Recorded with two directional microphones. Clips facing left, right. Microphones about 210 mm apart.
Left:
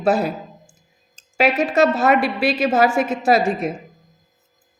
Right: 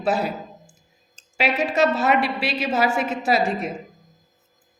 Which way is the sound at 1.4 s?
50° left (ahead or behind).